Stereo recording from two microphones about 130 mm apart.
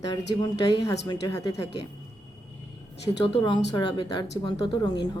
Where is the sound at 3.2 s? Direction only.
40° left (ahead or behind).